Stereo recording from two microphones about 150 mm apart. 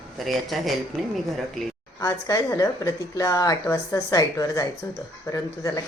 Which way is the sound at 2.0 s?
25° left (ahead or behind).